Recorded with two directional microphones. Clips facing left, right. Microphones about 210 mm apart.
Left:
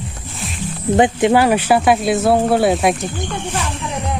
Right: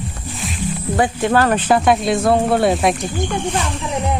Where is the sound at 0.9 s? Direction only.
20° left (ahead or behind); by 3.1 s centre (ahead or behind).